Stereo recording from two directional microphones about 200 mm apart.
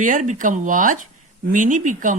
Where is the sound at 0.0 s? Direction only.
40° right (ahead or behind).